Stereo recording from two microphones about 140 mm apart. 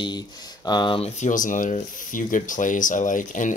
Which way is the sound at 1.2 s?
65° left (ahead or behind).